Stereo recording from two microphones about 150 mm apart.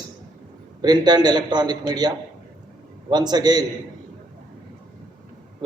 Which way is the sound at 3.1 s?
25° right (ahead or behind).